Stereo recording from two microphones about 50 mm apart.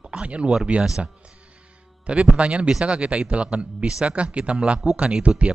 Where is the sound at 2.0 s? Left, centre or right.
Right.